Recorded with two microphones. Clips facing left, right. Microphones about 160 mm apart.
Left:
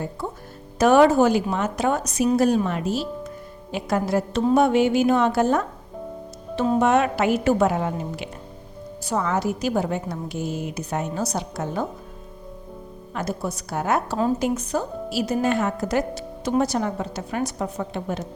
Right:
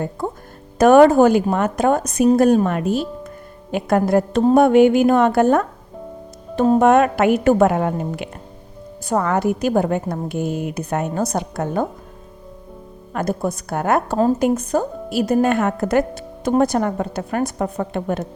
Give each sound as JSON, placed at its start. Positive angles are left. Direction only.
{"t": 0.2, "sound": "music", "side_deg": -50}
{"t": 0.8, "sound": "a woman's voice", "side_deg": -50}
{"t": 13.1, "sound": "a woman's voice", "side_deg": -50}